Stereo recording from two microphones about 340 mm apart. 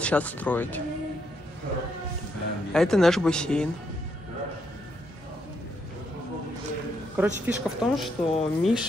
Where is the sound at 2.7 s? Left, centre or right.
Centre.